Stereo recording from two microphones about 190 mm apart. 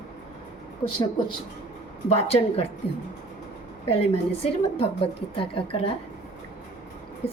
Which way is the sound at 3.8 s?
30° left (ahead or behind).